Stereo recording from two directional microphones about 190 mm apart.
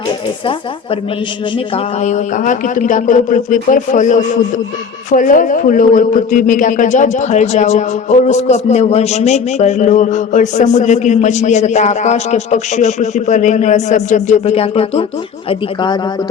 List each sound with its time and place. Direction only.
1.5 s a man's voice: 35° left (ahead or behind)